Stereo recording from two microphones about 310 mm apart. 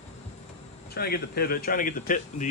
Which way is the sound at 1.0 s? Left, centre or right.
Left.